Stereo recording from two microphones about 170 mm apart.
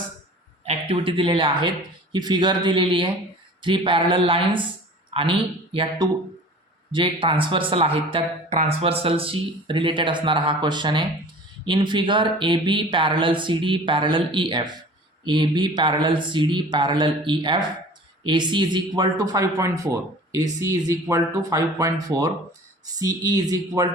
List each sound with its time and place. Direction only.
0.6 s speech: 35° right (ahead or behind); by 23.9 s 20° right (ahead or behind)